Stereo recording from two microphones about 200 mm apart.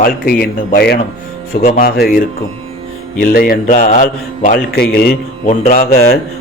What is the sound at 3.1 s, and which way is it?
A man's voice, 45° left (ahead or behind).